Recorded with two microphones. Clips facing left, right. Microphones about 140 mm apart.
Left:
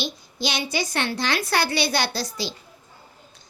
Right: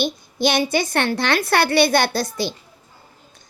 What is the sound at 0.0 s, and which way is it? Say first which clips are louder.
A woman's voice: right 8 dB; 55° right (ahead or behind).